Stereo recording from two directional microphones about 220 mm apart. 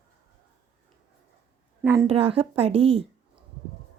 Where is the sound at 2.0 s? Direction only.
25° right (ahead or behind).